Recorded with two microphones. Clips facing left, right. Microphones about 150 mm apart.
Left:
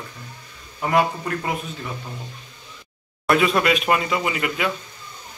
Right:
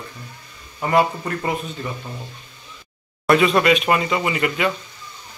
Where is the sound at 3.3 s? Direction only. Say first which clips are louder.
Right 3 dB; centre (ahead or behind).